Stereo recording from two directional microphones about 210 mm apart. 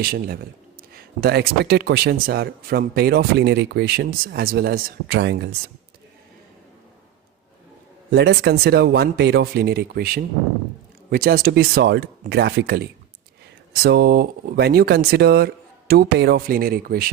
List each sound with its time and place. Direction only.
0.0 s speech: 45° right (ahead or behind)
8.1 s speech: 50° right (ahead or behind)